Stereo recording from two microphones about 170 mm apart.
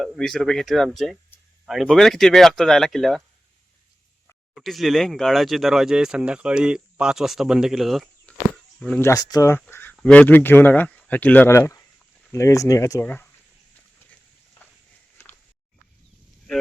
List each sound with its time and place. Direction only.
0.0 s speech: centre (ahead or behind)
4.5 s speech: centre (ahead or behind)
9.0 s speech: 20° left (ahead or behind)